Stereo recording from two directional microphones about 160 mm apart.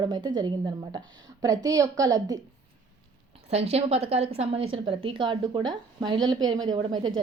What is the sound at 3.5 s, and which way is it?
A woman's voice, 40° right (ahead or behind).